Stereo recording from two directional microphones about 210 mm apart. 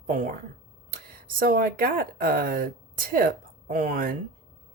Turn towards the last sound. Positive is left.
turn(degrees=-40)  # may be behind; listen again after turning